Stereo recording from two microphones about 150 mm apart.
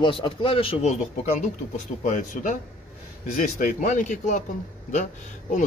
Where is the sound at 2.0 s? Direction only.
55° left (ahead or behind).